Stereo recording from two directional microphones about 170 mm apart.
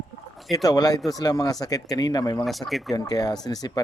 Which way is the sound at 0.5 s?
20° left (ahead or behind).